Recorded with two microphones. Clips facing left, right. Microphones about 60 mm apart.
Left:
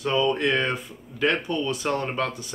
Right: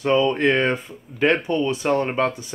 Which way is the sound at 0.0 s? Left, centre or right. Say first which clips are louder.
Right 4 dB; right.